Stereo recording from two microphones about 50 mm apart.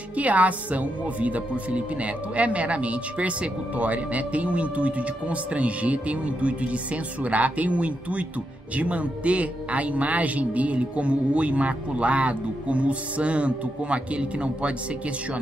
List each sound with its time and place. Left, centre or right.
0.1 s speech: right